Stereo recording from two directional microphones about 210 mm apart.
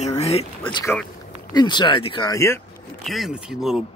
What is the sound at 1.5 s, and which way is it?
Speech, 20° left (ahead or behind).